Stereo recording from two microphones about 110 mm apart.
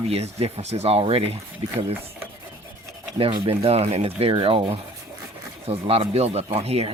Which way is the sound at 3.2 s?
55° right (ahead or behind).